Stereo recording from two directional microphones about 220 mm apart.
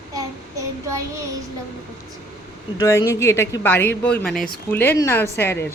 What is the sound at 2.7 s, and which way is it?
Speech, 15° left (ahead or behind).